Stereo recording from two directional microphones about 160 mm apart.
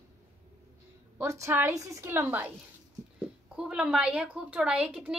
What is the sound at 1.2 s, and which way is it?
A woman's voice, 20° right (ahead or behind).